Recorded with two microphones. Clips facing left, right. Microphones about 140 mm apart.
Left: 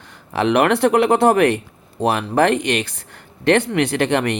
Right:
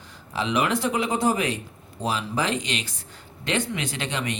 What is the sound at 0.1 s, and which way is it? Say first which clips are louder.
A man's voice: left 9 dB; 65° left (ahead or behind).